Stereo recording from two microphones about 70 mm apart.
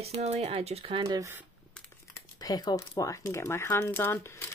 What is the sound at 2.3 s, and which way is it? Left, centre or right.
Speech, left.